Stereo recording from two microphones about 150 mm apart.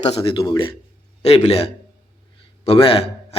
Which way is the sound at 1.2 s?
45° left (ahead or behind).